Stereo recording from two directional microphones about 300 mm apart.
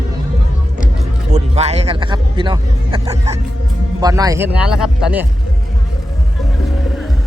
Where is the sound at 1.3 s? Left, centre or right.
Right; by 5.2 s centre.